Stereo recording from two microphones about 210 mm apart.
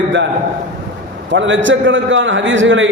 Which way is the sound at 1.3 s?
60° right (ahead or behind).